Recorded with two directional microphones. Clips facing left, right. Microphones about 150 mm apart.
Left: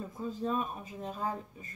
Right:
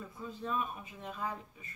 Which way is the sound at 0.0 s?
35° left (ahead or behind).